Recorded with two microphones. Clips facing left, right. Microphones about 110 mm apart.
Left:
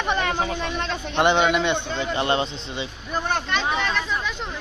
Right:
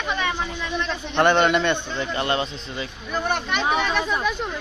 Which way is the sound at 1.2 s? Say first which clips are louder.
Right 1 dB; 15° left (ahead or behind).